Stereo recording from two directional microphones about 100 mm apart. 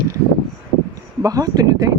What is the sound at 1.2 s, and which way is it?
Speech, 40° right (ahead or behind).